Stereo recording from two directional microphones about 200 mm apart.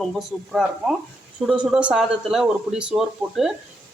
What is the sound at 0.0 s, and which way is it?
Speech, centre (ahead or behind).